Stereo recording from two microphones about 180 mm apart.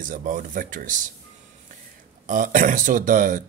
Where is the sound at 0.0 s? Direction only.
45° right (ahead or behind).